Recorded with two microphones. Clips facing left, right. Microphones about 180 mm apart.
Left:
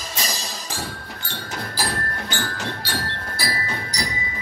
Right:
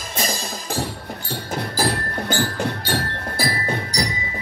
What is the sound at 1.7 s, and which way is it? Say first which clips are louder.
Music: right 5 dB; 40° right (ahead or behind).